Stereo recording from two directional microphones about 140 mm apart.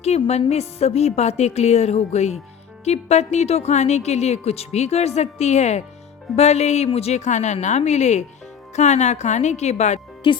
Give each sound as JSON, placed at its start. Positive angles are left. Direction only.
{"t": 0.0, "sound": "speech", "side_deg": 50}
{"t": 10.3, "sound": "speech", "side_deg": 35}